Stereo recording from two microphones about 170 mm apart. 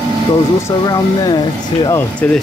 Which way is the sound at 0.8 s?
20° left (ahead or behind).